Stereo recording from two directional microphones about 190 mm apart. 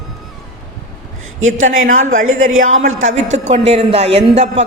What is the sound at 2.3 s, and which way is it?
Speech, 90° right.